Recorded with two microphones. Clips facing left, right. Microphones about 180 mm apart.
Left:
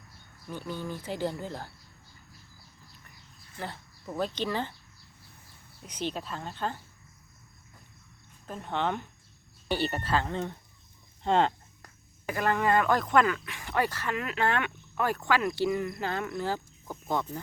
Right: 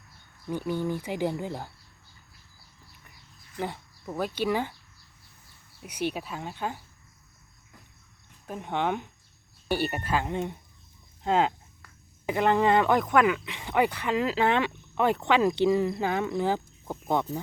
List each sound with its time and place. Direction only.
0.5 s speech: 15° right (ahead or behind)
3.6 s speech: 15° right (ahead or behind)
5.8 s speech: 10° right (ahead or behind)
8.4 s speech: 15° right (ahead or behind)
11.2 s speech: 5° right (ahead or behind)
12.2 s speech: 20° right (ahead or behind)